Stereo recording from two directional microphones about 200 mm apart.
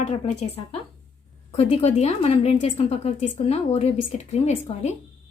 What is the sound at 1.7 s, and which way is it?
A woman's voice, 35° left (ahead or behind).